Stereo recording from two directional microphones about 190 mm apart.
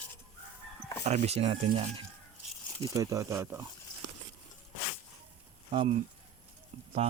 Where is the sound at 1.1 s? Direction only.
35° right (ahead or behind).